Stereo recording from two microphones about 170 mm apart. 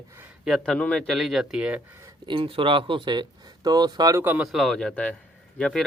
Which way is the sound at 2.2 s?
30° right (ahead or behind).